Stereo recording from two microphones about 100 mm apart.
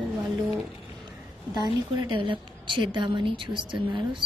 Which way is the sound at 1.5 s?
45° right (ahead or behind).